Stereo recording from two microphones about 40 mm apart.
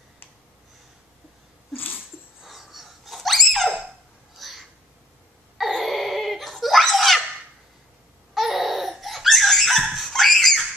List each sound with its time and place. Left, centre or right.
1.7 s a sound: left
2.4 s breathing: centre
4.4 s crow: centre
5.6 s giggle: centre
8.4 s babbling: centre
9.0 s a sound: centre